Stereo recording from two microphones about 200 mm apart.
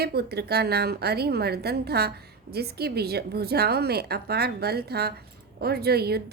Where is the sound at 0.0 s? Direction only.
55° right (ahead or behind).